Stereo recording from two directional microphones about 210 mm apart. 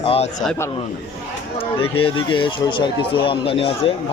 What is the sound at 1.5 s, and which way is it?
Speech, 25° left (ahead or behind).